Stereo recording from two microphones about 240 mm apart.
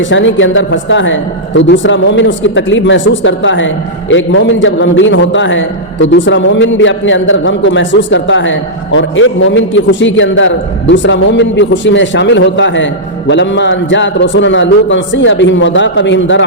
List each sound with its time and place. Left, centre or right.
0.0 s a man's voice: left